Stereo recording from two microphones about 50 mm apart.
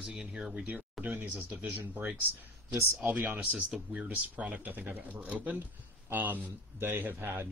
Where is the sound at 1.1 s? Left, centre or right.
Right.